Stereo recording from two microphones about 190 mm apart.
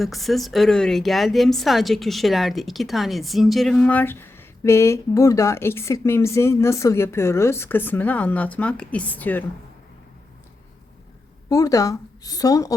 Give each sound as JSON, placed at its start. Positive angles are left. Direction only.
{"t": 0.0, "sound": "speech", "side_deg": 0}
{"t": 11.4, "sound": "speech", "side_deg": 15}